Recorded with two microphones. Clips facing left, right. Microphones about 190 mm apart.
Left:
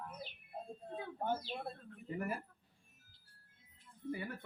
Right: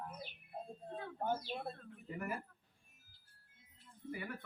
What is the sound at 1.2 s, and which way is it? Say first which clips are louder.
Speech: even; centre (ahead or behind).